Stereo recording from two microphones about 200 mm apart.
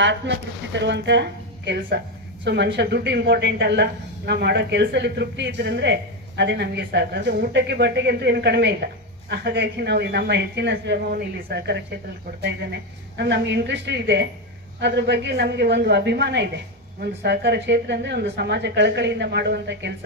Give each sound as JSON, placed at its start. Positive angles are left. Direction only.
{"t": 0.0, "sound": "speech", "side_deg": -60}
{"t": 13.2, "sound": "speech", "side_deg": -55}